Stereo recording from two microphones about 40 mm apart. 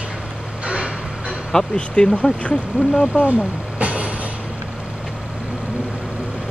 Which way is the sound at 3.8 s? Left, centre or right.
Right.